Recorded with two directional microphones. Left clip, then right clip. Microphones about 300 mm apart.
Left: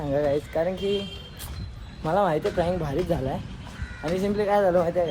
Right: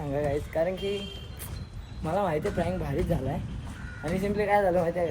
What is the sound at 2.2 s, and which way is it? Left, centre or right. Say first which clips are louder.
Speech: left 5 dB; centre.